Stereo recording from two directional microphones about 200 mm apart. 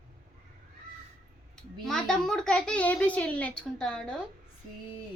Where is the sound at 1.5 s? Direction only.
Centre (ahead or behind).